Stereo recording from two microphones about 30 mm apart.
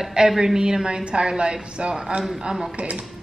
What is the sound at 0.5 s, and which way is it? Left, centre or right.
Speech, right.